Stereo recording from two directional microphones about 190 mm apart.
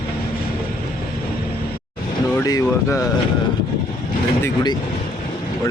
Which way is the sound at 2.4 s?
15° left (ahead or behind).